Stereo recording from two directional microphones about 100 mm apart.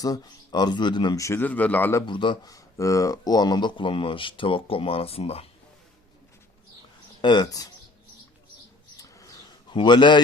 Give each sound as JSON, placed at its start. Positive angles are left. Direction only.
{"t": 0.0, "sound": "speech", "side_deg": 40}
{"t": 1.2, "sound": "speech", "side_deg": 25}
{"t": 1.5, "sound": "a man's voice", "side_deg": 15}
{"t": 2.0, "sound": "speech", "side_deg": 50}
{"t": 2.5, "sound": "speech", "side_deg": 35}
{"t": 7.2, "sound": "speech", "side_deg": 45}
{"t": 9.0, "sound": "bird", "side_deg": 35}
{"t": 9.6, "sound": "a man's voice", "side_deg": 50}